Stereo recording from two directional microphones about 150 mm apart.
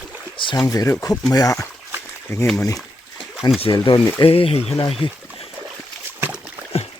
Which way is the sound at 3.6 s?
35° left (ahead or behind).